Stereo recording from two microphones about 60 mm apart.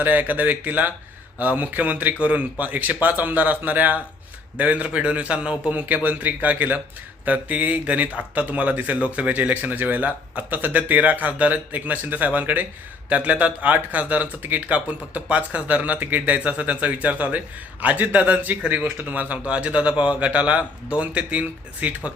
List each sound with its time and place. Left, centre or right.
0.0 s speech: right
5.8 s speech: right